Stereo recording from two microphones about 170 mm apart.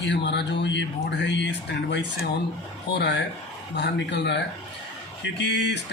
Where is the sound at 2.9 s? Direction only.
90° left.